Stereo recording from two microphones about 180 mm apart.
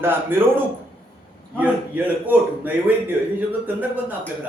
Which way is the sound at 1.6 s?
10° right (ahead or behind).